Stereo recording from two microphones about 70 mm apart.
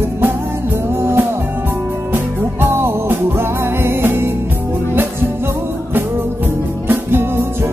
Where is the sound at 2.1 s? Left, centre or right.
Right.